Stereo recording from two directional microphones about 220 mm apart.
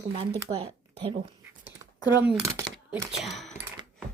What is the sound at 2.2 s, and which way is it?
Speech, 10° right (ahead or behind).